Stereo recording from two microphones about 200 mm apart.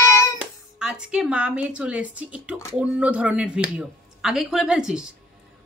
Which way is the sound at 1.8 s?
5° right (ahead or behind).